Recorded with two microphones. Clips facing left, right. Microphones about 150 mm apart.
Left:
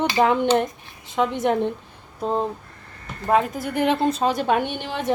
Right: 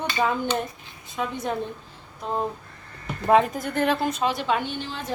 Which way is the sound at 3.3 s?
Centre (ahead or behind).